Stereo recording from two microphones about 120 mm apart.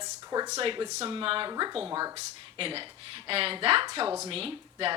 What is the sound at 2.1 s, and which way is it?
Speech, 50° right (ahead or behind).